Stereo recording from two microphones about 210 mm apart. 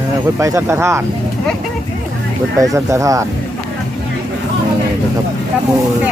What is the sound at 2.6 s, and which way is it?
Speech, 15° right (ahead or behind).